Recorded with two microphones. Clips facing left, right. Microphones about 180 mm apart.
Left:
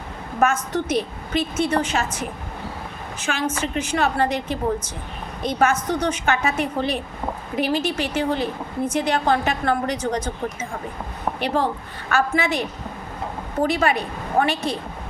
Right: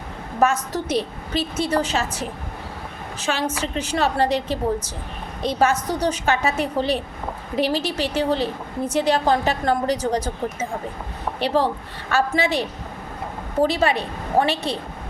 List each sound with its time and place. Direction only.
0.3 s a woman's voice: 35° right (ahead or behind)